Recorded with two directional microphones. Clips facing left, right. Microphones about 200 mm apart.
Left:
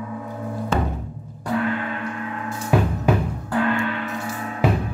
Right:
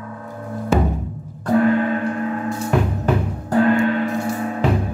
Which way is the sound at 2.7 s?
5° left (ahead or behind).